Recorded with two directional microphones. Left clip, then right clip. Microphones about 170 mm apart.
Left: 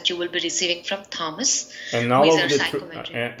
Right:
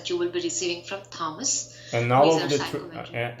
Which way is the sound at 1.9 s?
10° left (ahead or behind).